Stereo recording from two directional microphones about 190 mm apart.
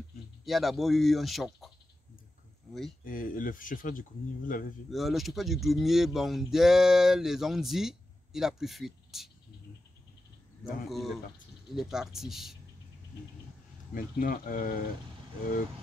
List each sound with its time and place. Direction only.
0.5 s speech: centre (ahead or behind)
3.0 s speech: 45° left (ahead or behind)
4.9 s speech: centre (ahead or behind)
10.9 s speech: centre (ahead or behind)
13.9 s speech: 50° left (ahead or behind)